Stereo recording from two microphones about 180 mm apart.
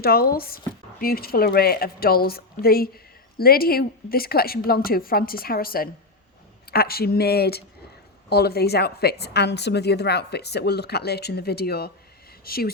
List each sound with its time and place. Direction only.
0.0 s speech: 60° left (ahead or behind)